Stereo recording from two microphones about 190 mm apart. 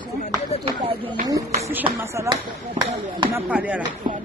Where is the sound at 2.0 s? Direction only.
15° right (ahead or behind).